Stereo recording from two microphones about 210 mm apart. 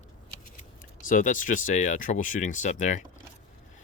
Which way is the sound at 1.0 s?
40° left (ahead or behind).